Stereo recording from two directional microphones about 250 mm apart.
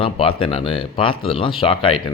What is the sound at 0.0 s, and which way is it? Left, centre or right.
Speech, left.